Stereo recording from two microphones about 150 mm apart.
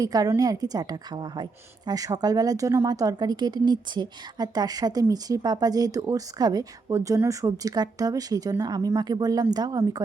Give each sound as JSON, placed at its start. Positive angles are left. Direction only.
{"t": 0.0, "sound": "speech", "side_deg": -25}